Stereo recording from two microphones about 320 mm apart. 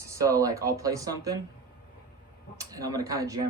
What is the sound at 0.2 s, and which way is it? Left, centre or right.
Speech, centre.